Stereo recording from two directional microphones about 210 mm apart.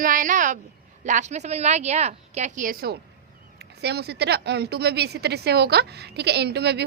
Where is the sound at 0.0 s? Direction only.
40° right (ahead or behind).